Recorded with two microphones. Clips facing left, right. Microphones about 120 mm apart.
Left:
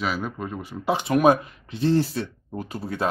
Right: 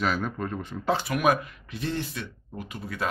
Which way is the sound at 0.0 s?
5° left (ahead or behind).